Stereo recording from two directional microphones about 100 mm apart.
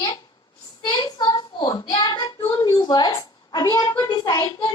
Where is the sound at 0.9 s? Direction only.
50° left (ahead or behind).